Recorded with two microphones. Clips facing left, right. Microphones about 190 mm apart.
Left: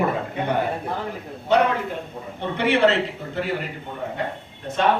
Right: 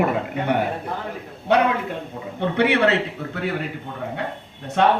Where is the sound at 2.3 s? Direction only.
60° right (ahead or behind).